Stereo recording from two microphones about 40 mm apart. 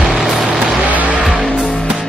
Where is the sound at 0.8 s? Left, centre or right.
Right.